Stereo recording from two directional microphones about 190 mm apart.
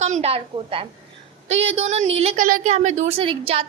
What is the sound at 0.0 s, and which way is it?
A woman's voice, 35° right (ahead or behind).